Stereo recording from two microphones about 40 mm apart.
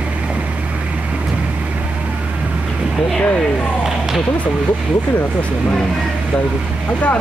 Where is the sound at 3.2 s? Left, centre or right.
Left.